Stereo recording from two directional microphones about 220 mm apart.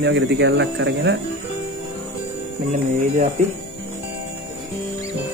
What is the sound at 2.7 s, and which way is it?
Speech, 30° right (ahead or behind).